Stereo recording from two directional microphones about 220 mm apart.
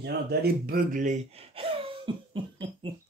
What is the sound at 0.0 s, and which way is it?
Speech, 45° right (ahead or behind).